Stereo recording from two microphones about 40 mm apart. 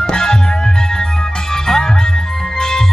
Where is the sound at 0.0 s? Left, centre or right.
Centre.